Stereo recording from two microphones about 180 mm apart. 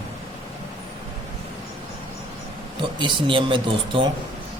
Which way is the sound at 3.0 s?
25° right (ahead or behind).